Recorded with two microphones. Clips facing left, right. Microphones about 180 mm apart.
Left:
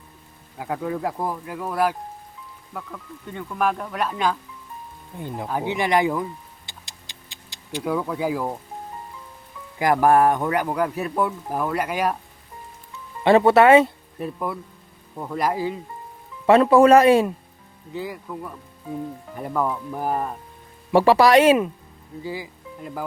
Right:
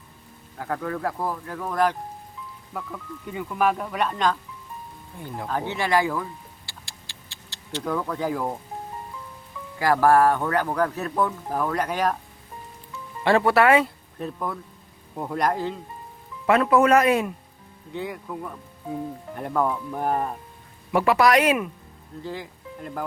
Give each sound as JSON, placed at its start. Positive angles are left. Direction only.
{"t": 0.6, "sound": "speech", "side_deg": 15}
{"t": 2.7, "sound": "speech", "side_deg": -5}
{"t": 5.1, "sound": "speech", "side_deg": 20}
{"t": 6.7, "sound": "a sound", "side_deg": 20}
{"t": 9.7, "sound": "speech", "side_deg": 20}
{"t": 13.2, "sound": "speech", "side_deg": 20}
{"t": 14.2, "sound": "speech", "side_deg": 10}
{"t": 15.1, "sound": "speech", "side_deg": -10}
{"t": 15.4, "sound": "speech", "side_deg": 5}
{"t": 16.5, "sound": "speech", "side_deg": 30}
{"t": 17.9, "sound": "speech", "side_deg": 0}
{"t": 20.9, "sound": "speech", "side_deg": 30}
{"t": 22.2, "sound": "speech", "side_deg": 10}